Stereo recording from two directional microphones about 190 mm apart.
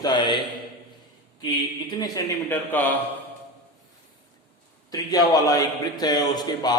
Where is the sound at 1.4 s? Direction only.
25° left (ahead or behind).